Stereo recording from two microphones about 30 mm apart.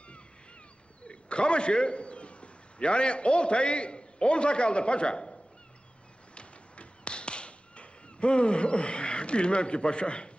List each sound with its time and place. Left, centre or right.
1.0 s a man's voice: left
6.3 s fowl: left